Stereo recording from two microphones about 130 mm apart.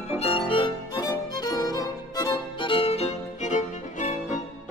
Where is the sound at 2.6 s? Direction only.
45° left (ahead or behind).